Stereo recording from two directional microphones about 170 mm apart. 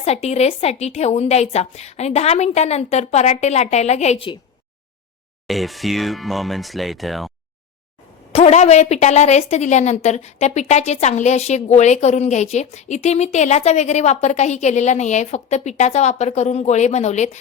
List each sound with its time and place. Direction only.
0.0 s a woman's voice: 40° left (ahead or behind)
5.5 s speech: centre (ahead or behind)
8.3 s a woman's voice: 40° left (ahead or behind)